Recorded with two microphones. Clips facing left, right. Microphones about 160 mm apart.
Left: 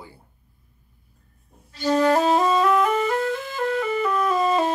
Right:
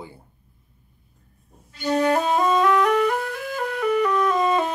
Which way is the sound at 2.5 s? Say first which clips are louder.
Right 1 dB; 5° left (ahead or behind).